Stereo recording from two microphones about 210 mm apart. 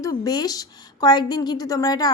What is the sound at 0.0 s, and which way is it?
A woman's voice, 20° left (ahead or behind).